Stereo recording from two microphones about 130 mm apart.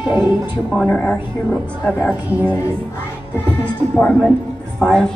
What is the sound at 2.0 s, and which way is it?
Music, 10° right (ahead or behind).